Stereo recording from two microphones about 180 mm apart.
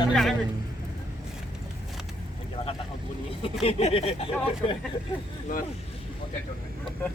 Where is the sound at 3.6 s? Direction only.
30° left (ahead or behind).